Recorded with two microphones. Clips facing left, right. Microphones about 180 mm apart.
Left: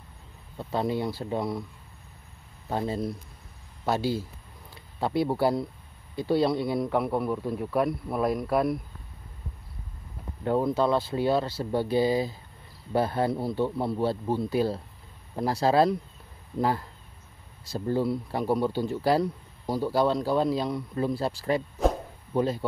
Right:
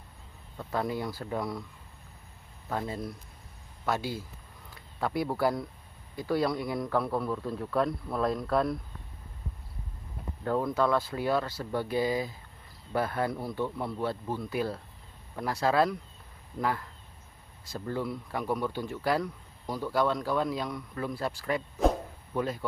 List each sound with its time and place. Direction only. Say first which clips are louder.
0.6 s speech: left 4 dB; 25° left (ahead or behind)
2.7 s a man's voice: left 5 dB; 30° left (ahead or behind)
7.7 s speech: left 2 dB; 10° left (ahead or behind)
10.4 s a man's voice: left 3 dB; 25° left (ahead or behind)